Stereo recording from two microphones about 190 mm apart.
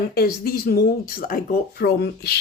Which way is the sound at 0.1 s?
55° left (ahead or behind).